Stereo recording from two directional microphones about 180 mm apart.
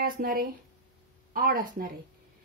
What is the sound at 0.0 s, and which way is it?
Speech, 55° right (ahead or behind).